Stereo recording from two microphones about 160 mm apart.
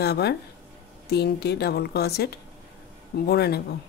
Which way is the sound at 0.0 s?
90° left.